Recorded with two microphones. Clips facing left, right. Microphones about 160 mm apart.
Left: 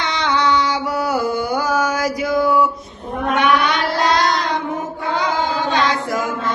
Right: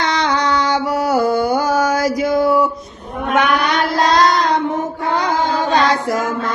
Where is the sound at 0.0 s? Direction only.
40° right (ahead or behind).